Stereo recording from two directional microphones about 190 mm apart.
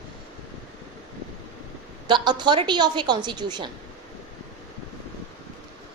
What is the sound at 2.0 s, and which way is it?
A woman's voice, 25° right (ahead or behind).